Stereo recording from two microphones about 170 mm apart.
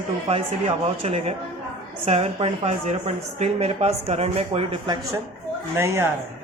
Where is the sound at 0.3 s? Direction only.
35° right (ahead or behind).